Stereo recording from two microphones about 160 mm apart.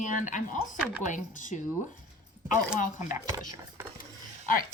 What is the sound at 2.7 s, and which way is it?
Speech, 55° left (ahead or behind).